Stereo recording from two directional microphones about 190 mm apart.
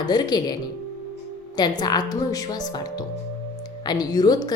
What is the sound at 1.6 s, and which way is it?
Speech, 20° left (ahead or behind).